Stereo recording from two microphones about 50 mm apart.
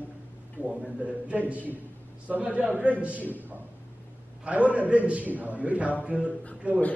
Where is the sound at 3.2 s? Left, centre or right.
Left.